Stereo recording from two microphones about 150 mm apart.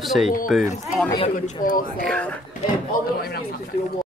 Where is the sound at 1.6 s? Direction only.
65° left (ahead or behind).